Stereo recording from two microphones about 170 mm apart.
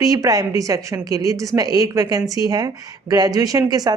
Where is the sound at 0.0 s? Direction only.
20° right (ahead or behind).